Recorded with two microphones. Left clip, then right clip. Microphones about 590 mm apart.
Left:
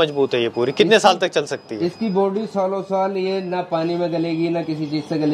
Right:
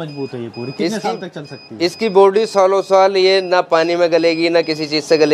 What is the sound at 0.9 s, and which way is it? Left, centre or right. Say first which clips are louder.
Speech: left 8 dB; left.